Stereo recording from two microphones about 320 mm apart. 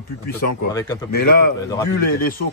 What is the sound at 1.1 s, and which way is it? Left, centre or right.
Speech, left.